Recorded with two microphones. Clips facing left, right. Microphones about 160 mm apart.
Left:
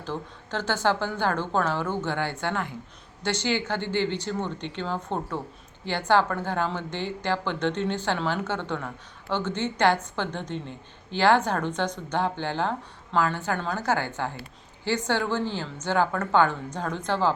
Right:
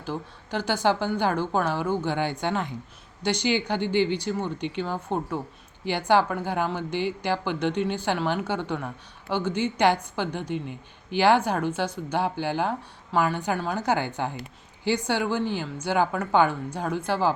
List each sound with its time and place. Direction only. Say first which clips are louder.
0.0 s a woman's voice: right 1 dB; 10° right (ahead or behind)